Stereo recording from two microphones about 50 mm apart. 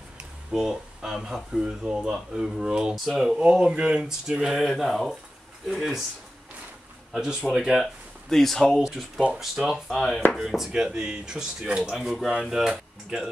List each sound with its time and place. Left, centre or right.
0.5 s speech: centre
3.4 s speech: right; by 6.0 s centre
7.5 s speech: centre
7.8 s speech: centre
8.7 s speech: centre